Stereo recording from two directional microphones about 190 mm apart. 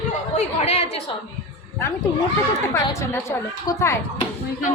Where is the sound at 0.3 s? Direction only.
35° left (ahead or behind).